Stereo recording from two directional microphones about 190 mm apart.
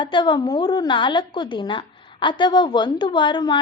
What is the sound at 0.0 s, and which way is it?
A woman's voice, 25° left (ahead or behind).